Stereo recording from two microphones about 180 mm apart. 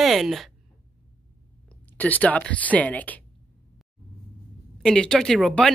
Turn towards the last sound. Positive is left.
turn(degrees=0)  # may be behind; listen again after turning